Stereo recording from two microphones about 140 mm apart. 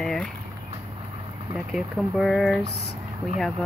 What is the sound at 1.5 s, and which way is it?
Speech, centre (ahead or behind).